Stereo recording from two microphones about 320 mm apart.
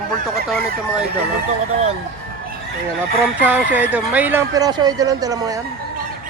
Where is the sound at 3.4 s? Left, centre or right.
Centre.